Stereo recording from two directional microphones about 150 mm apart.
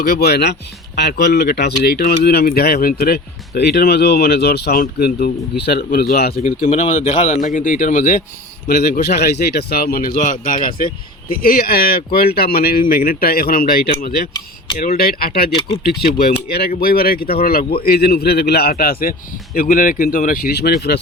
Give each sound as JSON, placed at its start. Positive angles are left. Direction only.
{"t": 0.0, "sound": "speech", "side_deg": 90}
{"t": 6.7, "sound": "speech", "side_deg": 50}
{"t": 8.6, "sound": "speech", "side_deg": 90}
{"t": 10.4, "sound": "speech", "side_deg": 65}
{"t": 11.4, "sound": "speech", "side_deg": 80}
{"t": 14.0, "sound": "speech", "side_deg": 90}
{"t": 19.5, "sound": "speech", "side_deg": 70}